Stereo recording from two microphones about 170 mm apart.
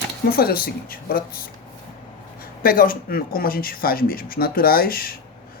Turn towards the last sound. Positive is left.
turn(degrees=60)  # may be behind; listen again after turning